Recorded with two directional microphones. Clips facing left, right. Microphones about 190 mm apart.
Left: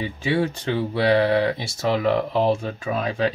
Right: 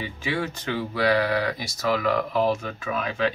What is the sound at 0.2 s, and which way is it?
Speech, 30° left (ahead or behind).